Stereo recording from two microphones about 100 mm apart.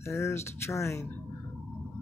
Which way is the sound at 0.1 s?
25° left (ahead or behind).